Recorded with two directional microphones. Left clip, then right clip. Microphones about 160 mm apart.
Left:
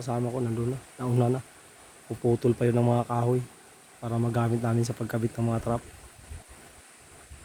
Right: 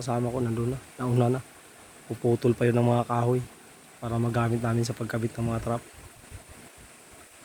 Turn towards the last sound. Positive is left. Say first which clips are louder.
# left 1 dB
turn(degrees=25)  # may be behind; listen again after turning